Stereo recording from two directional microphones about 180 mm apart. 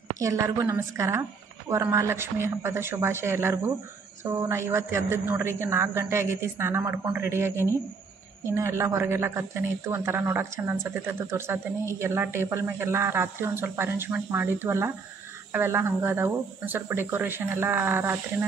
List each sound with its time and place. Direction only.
0.2 s a woman's voice: 15° right (ahead or behind)